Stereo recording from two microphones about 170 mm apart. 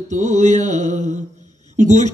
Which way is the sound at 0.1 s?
45° right (ahead or behind).